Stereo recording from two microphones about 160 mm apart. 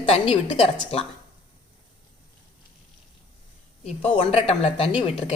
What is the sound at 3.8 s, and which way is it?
A woman's voice, 40° left (ahead or behind).